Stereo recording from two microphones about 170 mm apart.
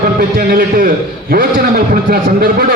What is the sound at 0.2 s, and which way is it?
A man's voice, 55° right (ahead or behind).